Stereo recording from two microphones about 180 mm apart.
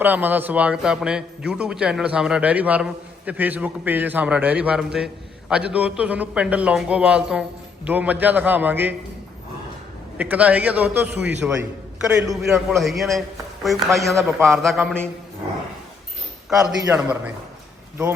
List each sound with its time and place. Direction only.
0.0 s a man's voice: 10° right (ahead or behind)
10.2 s a man's voice: 10° right (ahead or behind)
12.4 s a man's voice: centre (ahead or behind)
16.5 s a man's voice: 5° right (ahead or behind)